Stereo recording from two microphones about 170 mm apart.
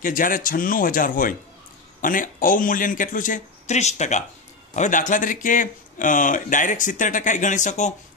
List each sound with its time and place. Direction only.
0.0 s speech: 55° left (ahead or behind)